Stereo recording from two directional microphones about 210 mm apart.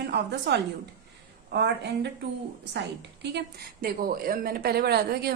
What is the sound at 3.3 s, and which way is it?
A woman's voice, 45° right (ahead or behind).